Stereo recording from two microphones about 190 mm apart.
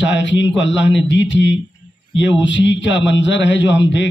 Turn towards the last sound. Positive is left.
turn(degrees=70)  # may be behind; listen again after turning